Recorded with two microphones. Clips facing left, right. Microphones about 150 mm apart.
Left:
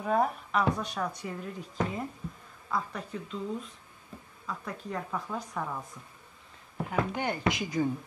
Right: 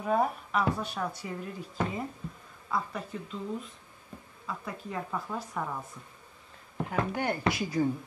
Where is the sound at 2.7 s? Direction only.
Centre (ahead or behind).